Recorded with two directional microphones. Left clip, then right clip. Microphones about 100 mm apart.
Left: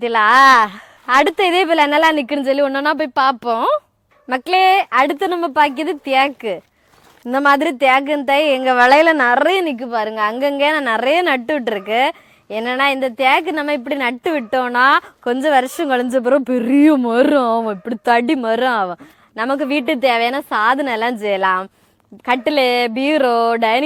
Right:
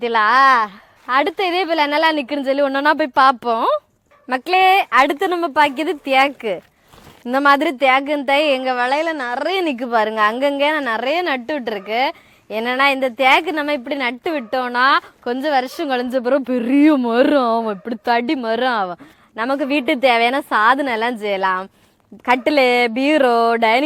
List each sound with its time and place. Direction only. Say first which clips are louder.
0.2 s a woman's voice: left 3 dB; 30° left (ahead or behind); by 3.3 s 10° right (ahead or behind)
3.4 s a woman's voice: left 1 dB; 5° left (ahead or behind)
4.5 s a woman's voice: even; 25° left (ahead or behind)
9.7 s a woman's voice: right 3 dB; 5° right (ahead or behind)
10.2 s a woman's voice: even; 15° left (ahead or behind)
10.9 s a woman's voice: left 4 dB; 60° left (ahead or behind)
12.5 s a woman's voice: even; 30° left (ahead or behind); by 16.0 s 45° left (ahead or behind)
16.0 s a woman's voice: left 3 dB; 35° left (ahead or behind)
22.4 s speech: even; 5° left (ahead or behind)